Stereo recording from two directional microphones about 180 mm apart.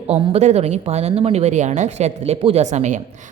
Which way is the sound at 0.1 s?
30° right (ahead or behind).